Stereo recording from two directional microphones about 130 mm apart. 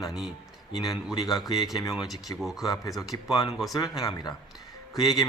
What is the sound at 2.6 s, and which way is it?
Speech, 30° left (ahead or behind).